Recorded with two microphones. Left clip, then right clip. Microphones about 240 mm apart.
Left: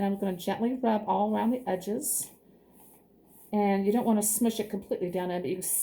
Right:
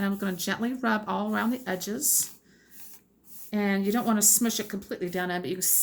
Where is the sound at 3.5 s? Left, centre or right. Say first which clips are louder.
Left 1 dB; right.